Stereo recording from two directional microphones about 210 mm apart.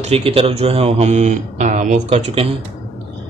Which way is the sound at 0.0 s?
30° right (ahead or behind).